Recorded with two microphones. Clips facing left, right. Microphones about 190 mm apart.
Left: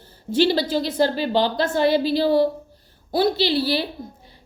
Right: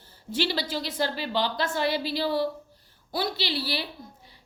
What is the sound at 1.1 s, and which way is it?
Speech, 25° left (ahead or behind).